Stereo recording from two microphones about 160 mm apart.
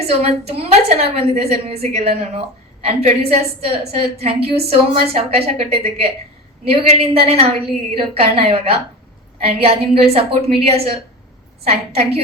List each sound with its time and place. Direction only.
0.0 s a woman's voice: 40° right (ahead or behind)